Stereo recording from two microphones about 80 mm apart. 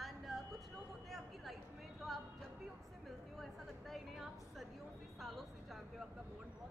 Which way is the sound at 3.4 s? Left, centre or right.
Centre.